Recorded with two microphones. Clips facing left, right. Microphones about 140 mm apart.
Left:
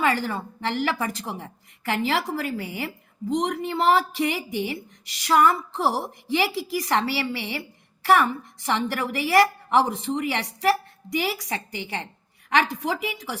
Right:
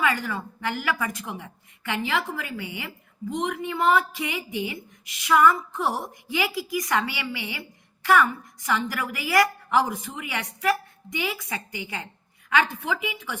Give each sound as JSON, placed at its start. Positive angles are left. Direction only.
{"t": 0.0, "sound": "a woman's voice", "side_deg": 30}